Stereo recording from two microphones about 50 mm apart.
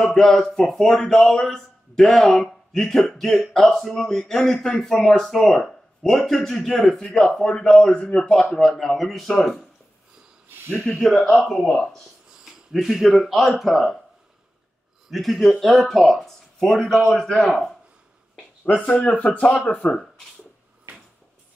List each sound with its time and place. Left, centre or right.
0.0 s speech: centre
10.8 s speech: centre
11.6 s speech: centre
12.4 s speech: centre
15.0 s speech: centre
18.9 s speech: left
19.1 s speech: left